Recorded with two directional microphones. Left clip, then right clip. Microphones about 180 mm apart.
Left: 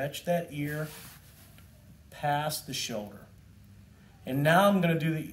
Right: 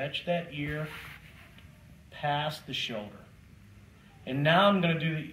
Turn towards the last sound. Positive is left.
turn(degrees=20)  # may be behind; listen again after turning